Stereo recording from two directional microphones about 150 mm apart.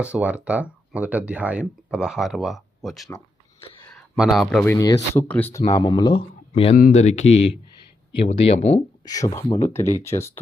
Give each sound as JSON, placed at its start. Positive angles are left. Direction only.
{"t": 0.0, "sound": "speech", "side_deg": -10}
{"t": 3.8, "sound": "a sound", "side_deg": 5}
{"t": 4.6, "sound": "speech", "side_deg": 20}
{"t": 6.5, "sound": "speech", "side_deg": 40}
{"t": 9.0, "sound": "speech", "side_deg": 20}